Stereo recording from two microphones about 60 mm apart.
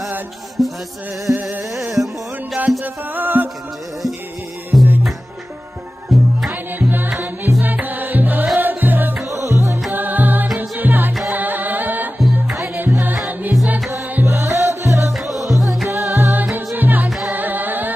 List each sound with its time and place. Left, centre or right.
0.6 s music: centre
1.3 s carnatic music: right
2.8 s music: right
4.7 s music: centre
6.1 s music: centre
6.5 s music: right
9.2 s music: right
9.8 s music: right
12.2 s music: centre
12.7 s music: right
15.1 s music: centre
15.9 s music: right